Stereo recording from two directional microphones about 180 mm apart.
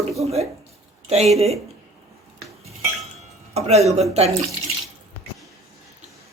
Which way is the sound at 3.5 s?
35° right (ahead or behind).